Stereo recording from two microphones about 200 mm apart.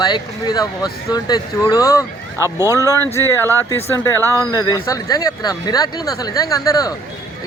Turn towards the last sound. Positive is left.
turn(degrees=20)  # may be behind; listen again after turning